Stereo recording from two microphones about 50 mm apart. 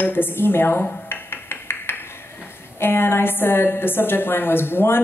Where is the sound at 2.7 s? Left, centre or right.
Left.